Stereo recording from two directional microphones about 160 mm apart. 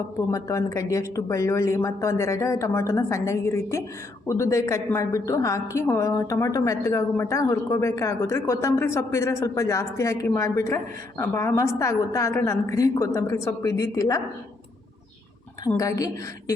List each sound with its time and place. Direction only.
0.3 s a woman's voice: 20° left (ahead or behind)
15.8 s a woman's voice: 20° left (ahead or behind)